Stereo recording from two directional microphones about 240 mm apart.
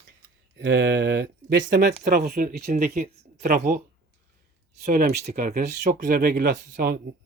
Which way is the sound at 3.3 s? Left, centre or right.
Right.